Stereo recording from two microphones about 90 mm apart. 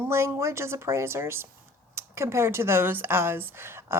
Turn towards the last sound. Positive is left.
turn(degrees=-25)  # may be behind; listen again after turning